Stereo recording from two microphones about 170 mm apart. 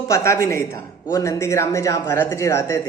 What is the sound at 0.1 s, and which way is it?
Speech, 15° left (ahead or behind).